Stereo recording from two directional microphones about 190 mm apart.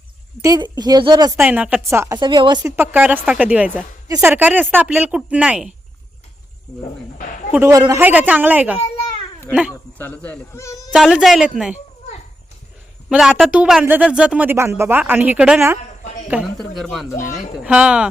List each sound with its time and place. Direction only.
0.4 s a woman's voice: 20° right (ahead or behind)
1.4 s a woman's voice: 10° right (ahead or behind)
2.7 s speech: 10° right (ahead or behind)
7.2 s a sound: 45° left (ahead or behind)
7.5 s speech: 15° right (ahead or behind)
10.0 s speech: 10° left (ahead or behind)
10.9 s speech: centre (ahead or behind)
13.1 s speech: 5° right (ahead or behind)